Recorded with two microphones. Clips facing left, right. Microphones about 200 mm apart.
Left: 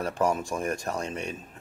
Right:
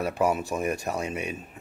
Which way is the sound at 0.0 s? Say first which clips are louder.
Right 1 dB; 10° right (ahead or behind).